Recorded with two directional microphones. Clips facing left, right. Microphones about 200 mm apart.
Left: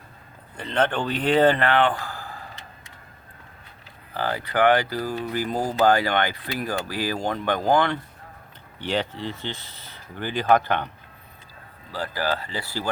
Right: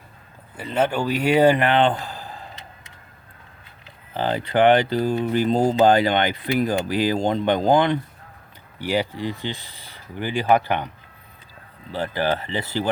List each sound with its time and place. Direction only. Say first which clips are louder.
0.5 s speech: right 2 dB; 5° right (ahead or behind)
4.1 s speech: right 4 dB; 20° right (ahead or behind)
11.9 s speech: right 4 dB; 20° right (ahead or behind)